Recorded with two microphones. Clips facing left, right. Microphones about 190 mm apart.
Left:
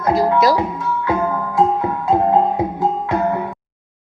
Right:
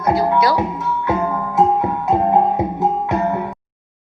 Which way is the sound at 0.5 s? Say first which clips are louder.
Even; 20° right (ahead or behind).